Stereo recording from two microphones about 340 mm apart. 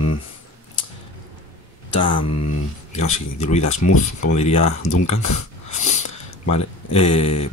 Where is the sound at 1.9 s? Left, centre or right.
Left.